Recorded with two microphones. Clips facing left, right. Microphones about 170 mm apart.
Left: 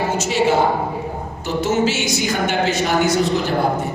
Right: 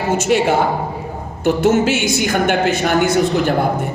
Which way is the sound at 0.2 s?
55° right (ahead or behind).